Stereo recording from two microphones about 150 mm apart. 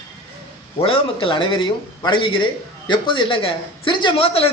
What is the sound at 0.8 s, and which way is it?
A man's voice, 35° left (ahead or behind).